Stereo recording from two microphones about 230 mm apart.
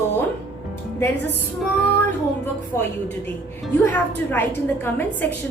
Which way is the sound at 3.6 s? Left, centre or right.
Centre.